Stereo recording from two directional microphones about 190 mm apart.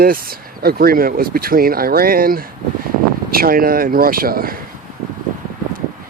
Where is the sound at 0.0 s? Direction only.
50° right (ahead or behind).